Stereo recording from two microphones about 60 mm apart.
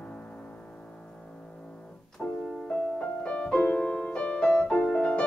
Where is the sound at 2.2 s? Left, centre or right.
Centre.